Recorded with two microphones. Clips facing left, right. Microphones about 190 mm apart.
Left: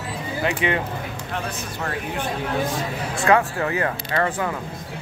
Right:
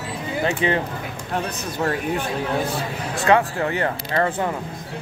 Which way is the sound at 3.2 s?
30° right (ahead or behind).